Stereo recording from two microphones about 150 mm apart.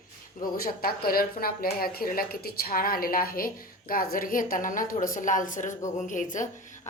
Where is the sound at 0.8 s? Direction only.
80° left; by 6.4 s 60° left (ahead or behind).